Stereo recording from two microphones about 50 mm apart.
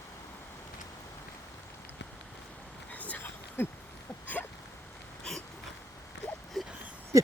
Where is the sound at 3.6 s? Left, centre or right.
Left.